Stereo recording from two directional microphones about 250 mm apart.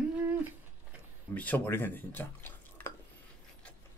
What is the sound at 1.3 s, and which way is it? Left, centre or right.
Speech, centre.